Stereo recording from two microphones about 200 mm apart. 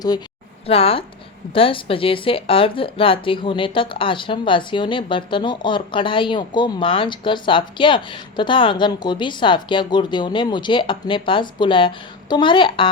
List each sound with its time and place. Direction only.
0.7 s speech: 30° left (ahead or behind)